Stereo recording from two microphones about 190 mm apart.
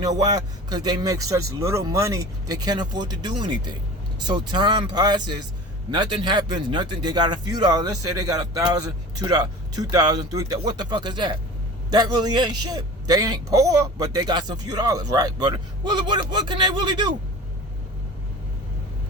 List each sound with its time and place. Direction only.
0.0 s a man's voice: 20° right (ahead or behind)